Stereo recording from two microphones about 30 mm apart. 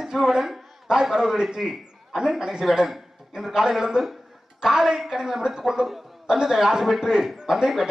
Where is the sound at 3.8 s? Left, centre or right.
Centre.